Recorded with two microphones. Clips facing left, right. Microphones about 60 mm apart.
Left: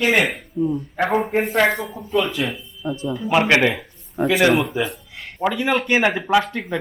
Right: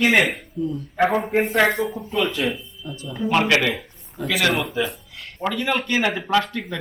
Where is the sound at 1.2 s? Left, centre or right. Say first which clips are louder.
Even; centre.